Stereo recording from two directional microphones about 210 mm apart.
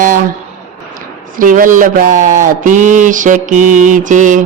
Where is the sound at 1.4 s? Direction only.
40° right (ahead or behind).